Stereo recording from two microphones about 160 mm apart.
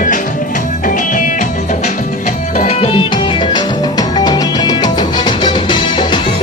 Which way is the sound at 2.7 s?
40° left (ahead or behind).